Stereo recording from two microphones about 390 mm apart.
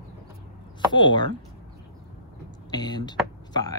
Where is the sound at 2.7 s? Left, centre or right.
Centre.